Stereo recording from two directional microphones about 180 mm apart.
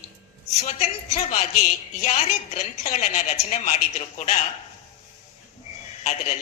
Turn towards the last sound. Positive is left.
turn(degrees=40)  # may be behind; listen again after turning